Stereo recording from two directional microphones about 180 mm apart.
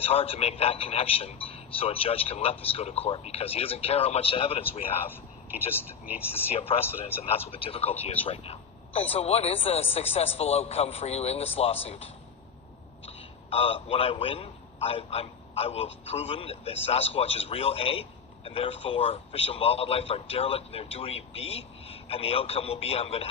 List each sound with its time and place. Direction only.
0.0 s a man's voice: 35° left (ahead or behind)
5.5 s speech: 10° right (ahead or behind)
6.5 s a man's voice: 35° left (ahead or behind)